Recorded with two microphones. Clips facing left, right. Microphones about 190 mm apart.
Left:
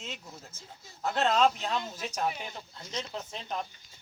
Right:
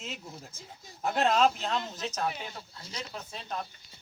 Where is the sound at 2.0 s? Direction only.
15° left (ahead or behind).